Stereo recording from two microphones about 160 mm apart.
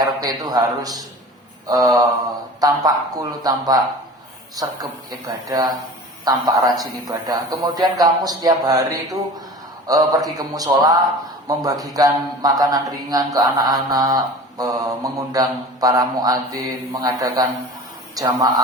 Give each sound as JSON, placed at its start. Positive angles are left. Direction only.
{"t": 0.0, "sound": "a man's voice", "side_deg": -25}